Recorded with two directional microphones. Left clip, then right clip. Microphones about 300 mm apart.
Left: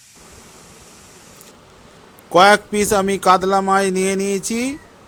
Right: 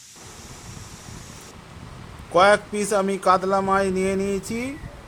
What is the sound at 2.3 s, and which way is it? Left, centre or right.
A man's voice, left.